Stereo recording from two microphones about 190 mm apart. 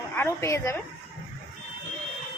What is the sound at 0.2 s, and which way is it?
Speech, 15° left (ahead or behind).